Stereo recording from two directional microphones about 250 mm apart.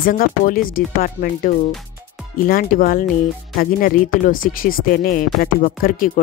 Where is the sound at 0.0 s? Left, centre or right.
Left.